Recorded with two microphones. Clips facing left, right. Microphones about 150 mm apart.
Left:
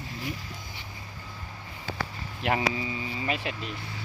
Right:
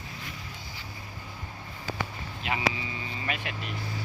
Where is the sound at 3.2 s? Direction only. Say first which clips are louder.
Left 4 dB; 25° left (ahead or behind).